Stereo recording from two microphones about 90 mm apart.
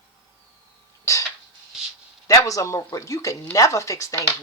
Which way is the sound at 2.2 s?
40° left (ahead or behind).